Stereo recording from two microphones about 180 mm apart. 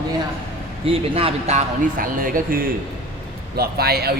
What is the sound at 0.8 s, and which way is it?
A man's voice, 30° right (ahead or behind).